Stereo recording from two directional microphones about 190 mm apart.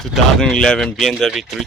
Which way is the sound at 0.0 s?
Centre (ahead or behind).